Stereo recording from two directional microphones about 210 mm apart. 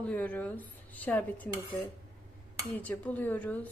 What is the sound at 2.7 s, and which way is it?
Speech, 10° left (ahead or behind).